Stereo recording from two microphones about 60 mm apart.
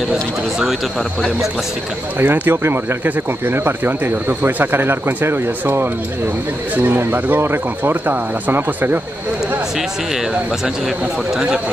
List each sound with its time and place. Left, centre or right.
2.1 s speech: right
11.3 s speech: centre